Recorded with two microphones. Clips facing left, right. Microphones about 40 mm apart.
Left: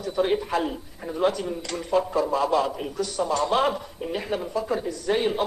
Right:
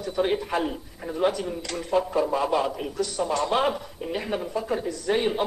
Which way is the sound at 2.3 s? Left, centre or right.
Right.